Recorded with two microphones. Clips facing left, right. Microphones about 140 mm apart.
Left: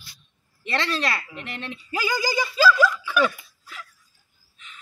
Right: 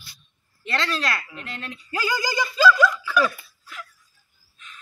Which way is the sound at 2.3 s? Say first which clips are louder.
Right 1 dB; 5° left (ahead or behind).